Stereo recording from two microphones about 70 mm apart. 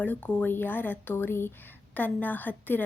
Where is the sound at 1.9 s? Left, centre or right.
Left.